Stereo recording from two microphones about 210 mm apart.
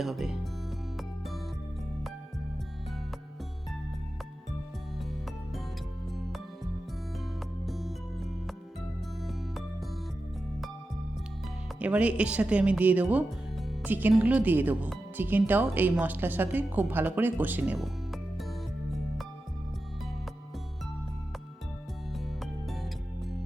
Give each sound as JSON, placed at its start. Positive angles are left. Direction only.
{"t": 0.0, "sound": "speech", "side_deg": 0}
{"t": 7.6, "sound": "music", "side_deg": 0}
{"t": 11.8, "sound": "speech", "side_deg": -5}